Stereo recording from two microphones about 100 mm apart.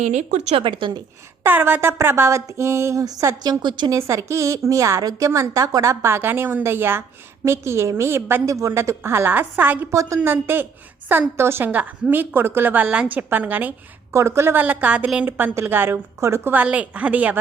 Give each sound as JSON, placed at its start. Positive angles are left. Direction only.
{"t": 0.4, "sound": "speech", "side_deg": -65}
{"t": 1.5, "sound": "a woman's voice", "side_deg": -20}
{"t": 3.9, "sound": "a woman's voice", "side_deg": -30}
{"t": 9.9, "sound": "a woman's voice", "side_deg": -30}
{"t": 10.2, "sound": "a woman's voice", "side_deg": -20}
{"t": 14.2, "sound": "a woman's voice", "side_deg": -25}